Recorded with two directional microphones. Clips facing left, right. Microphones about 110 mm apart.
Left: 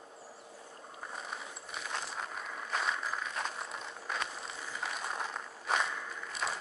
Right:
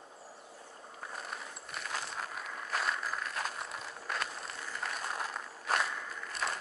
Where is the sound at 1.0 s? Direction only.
Centre (ahead or behind).